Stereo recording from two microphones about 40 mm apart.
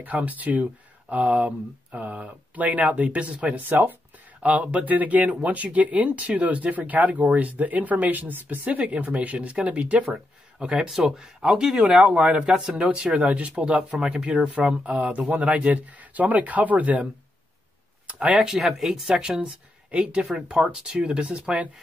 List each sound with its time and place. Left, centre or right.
0.0 s speech: right
3.5 s speech: right
4.4 s speech: right
10.6 s speech: right
11.7 s speech: right
18.0 s a sound: right
18.4 s speech: centre
19.0 s speech: centre